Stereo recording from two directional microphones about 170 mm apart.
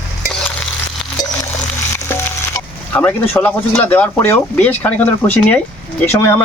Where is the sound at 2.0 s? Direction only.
15° left (ahead or behind).